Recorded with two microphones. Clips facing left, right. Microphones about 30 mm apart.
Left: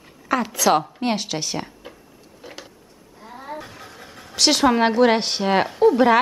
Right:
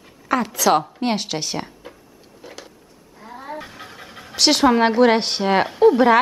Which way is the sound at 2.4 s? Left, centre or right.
Centre.